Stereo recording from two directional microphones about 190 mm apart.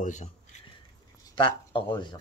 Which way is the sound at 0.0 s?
40° left (ahead or behind).